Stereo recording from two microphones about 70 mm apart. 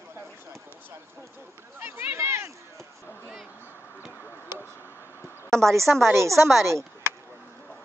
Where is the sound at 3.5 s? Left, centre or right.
Left.